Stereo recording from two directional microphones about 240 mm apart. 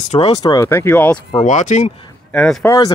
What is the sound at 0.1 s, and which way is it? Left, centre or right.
Speech, left.